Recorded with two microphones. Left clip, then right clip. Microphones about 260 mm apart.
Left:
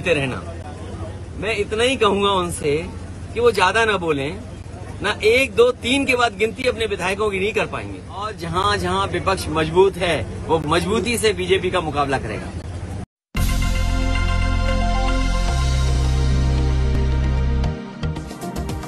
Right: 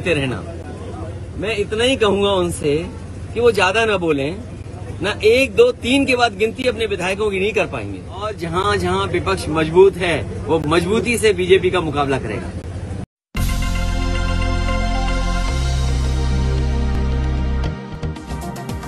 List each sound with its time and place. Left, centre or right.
0.0 s a man's voice: centre
1.4 s a man's voice: centre
13.4 s music: centre